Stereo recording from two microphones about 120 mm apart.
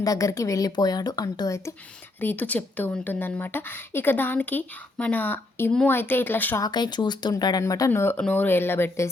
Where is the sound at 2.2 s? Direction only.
15° left (ahead or behind).